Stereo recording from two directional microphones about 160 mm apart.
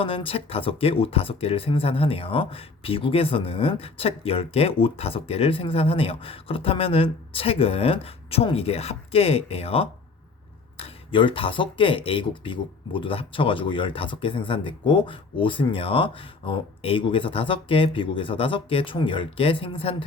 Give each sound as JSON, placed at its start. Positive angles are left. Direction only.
{"t": 0.0, "sound": "speech", "side_deg": 35}